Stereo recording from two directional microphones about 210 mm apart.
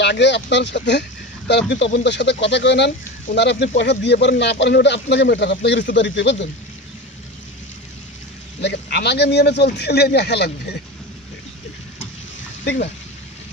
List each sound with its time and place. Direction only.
0.0 s a man's voice: 55° left (ahead or behind)
8.5 s a man's voice: 55° left (ahead or behind)